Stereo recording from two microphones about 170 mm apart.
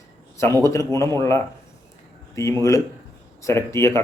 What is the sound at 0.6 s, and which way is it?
Speech, 15° left (ahead or behind).